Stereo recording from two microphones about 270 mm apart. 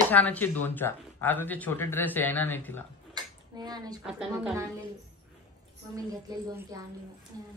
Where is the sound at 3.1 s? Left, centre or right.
Centre.